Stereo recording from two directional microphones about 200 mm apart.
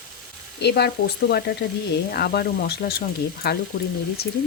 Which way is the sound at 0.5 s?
55° left (ahead or behind).